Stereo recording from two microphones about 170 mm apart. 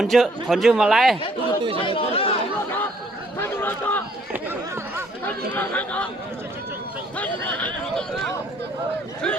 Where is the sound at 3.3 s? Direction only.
15° left (ahead or behind).